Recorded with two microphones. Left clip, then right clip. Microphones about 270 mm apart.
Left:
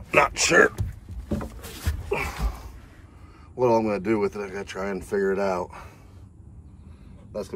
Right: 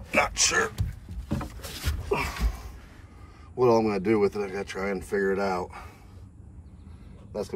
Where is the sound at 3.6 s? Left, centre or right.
Centre.